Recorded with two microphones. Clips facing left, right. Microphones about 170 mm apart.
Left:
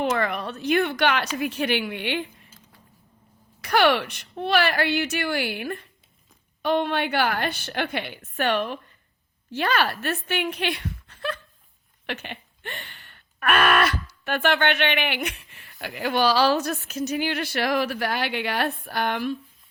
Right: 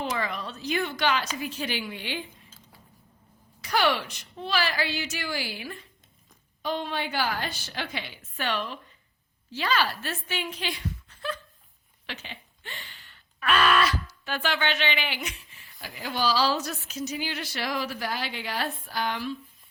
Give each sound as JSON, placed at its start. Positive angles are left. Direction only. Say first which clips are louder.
{"t": 0.0, "sound": "speech", "louder": "left 6 dB", "side_deg": 60}
{"t": 3.6, "sound": "a woman's voice", "louder": "left 5 dB", "side_deg": 60}